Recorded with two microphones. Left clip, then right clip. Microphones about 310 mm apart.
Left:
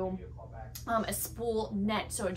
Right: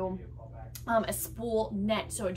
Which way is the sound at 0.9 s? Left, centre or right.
Centre.